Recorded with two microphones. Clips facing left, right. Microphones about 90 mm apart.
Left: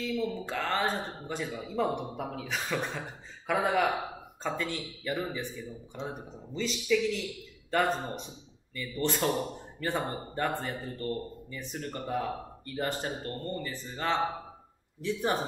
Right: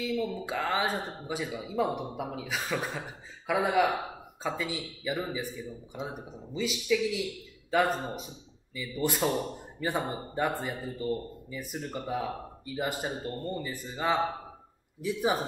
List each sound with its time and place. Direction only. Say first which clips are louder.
0.0 s speech: right 1 dB; 5° right (ahead or behind)